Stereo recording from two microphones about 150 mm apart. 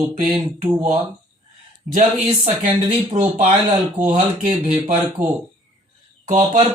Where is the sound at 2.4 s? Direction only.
40° right (ahead or behind).